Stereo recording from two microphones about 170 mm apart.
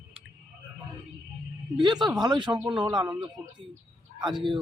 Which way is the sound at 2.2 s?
25° right (ahead or behind).